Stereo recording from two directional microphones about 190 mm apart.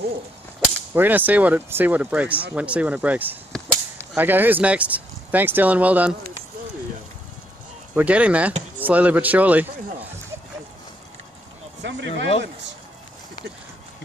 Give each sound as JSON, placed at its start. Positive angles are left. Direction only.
{"t": 0.9, "sound": "speech", "side_deg": -10}
{"t": 7.9, "sound": "speech", "side_deg": -5}
{"t": 11.8, "sound": "speech", "side_deg": -65}